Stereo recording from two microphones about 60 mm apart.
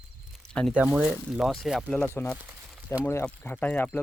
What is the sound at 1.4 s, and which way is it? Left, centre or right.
Speech, centre.